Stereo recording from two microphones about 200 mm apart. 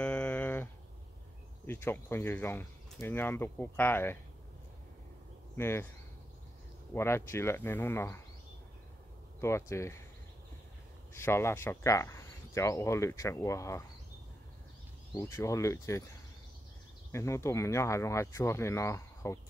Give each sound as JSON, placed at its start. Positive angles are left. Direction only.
{"t": 0.0, "sound": "a sound", "side_deg": 5}
{"t": 1.7, "sound": "speech", "side_deg": 10}
{"t": 5.6, "sound": "speech", "side_deg": 10}
{"t": 6.9, "sound": "speech", "side_deg": 15}
{"t": 9.4, "sound": "speech", "side_deg": 15}
{"t": 11.1, "sound": "speech", "side_deg": 10}
{"t": 15.1, "sound": "speech", "side_deg": 15}
{"t": 17.1, "sound": "speech", "side_deg": 15}